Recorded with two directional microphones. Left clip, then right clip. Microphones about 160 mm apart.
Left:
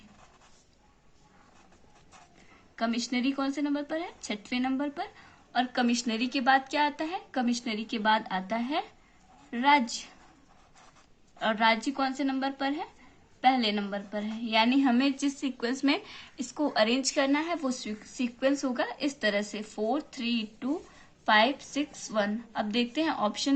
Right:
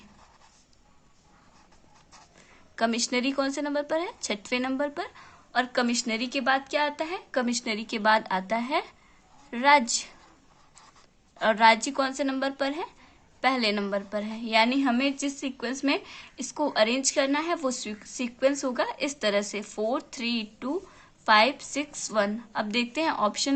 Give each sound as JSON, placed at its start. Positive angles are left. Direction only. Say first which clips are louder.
{"t": 2.7, "sound": "a woman's voice", "louder": "right 5 dB", "side_deg": -50}
{"t": 11.3, "sound": "a woman's voice", "louder": "right 6 dB", "side_deg": -40}